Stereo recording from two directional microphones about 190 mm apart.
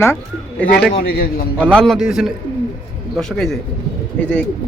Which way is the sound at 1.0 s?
50° left (ahead or behind).